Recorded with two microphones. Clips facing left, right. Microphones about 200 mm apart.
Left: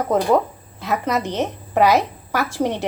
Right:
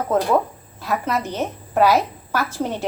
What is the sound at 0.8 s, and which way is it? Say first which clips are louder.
A woman's voice: left 1 dB; 20° left (ahead or behind).